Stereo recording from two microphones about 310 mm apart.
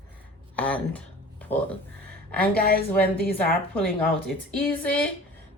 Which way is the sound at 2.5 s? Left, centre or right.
Left.